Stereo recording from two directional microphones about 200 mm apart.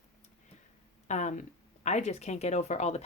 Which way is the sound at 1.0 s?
35° left (ahead or behind).